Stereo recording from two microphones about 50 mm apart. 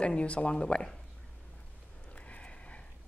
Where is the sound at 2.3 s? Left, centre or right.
Left.